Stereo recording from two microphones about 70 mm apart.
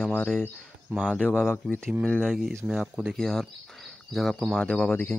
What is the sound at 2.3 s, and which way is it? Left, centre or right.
Speech, centre.